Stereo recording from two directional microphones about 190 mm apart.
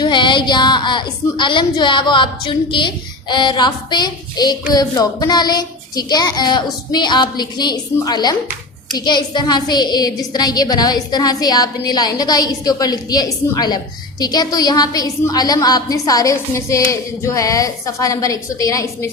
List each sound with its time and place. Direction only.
0.0 s a woman's voice: 25° left (ahead or behind)